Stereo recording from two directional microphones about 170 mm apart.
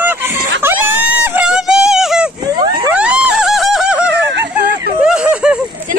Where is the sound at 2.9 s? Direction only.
5° right (ahead or behind).